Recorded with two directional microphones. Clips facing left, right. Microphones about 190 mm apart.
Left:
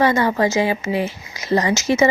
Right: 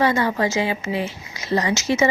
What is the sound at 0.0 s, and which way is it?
A woman's voice, 45° left (ahead or behind).